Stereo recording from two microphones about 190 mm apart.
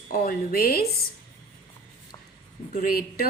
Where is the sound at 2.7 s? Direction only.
50° left (ahead or behind).